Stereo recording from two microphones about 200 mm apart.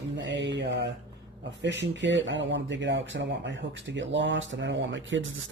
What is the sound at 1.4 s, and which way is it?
Speech, 60° right (ahead or behind).